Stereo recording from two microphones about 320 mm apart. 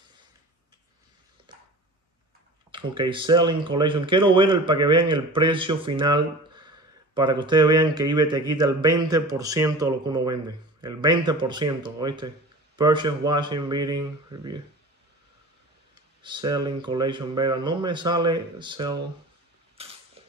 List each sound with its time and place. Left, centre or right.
1.5 s a sound: centre
2.7 s speech: centre
15.9 s speech: centre
19.8 s mechanisms: centre